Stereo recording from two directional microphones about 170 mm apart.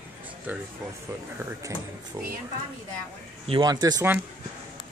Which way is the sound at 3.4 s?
30° right (ahead or behind).